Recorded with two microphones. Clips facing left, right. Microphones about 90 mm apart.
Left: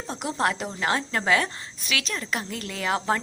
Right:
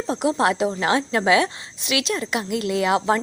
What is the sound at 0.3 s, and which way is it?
A woman's voice, 20° right (ahead or behind).